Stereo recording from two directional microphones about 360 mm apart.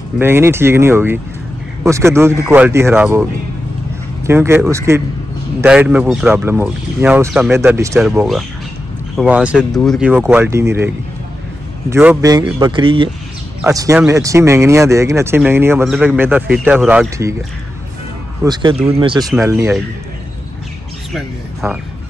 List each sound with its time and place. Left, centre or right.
0.2 s speech: centre
4.3 s speech: centre
11.9 s speech: centre
21.1 s a sound: centre